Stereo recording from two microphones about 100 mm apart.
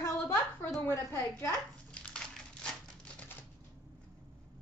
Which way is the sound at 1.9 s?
10° left (ahead or behind).